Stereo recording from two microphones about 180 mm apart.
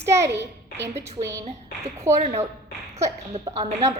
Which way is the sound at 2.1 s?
40° right (ahead or behind).